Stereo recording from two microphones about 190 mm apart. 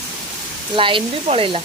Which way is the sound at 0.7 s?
25° right (ahead or behind).